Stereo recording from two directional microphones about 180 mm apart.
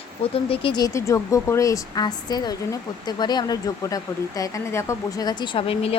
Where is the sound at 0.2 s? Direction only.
30° left (ahead or behind).